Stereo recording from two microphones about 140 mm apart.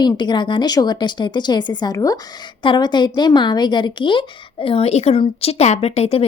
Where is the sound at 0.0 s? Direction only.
30° left (ahead or behind).